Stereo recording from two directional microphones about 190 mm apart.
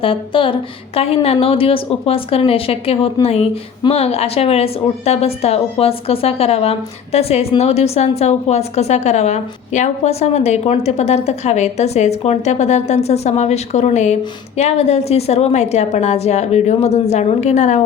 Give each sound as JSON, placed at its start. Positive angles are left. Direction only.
{"t": 0.0, "sound": "a woman's voice", "side_deg": 30}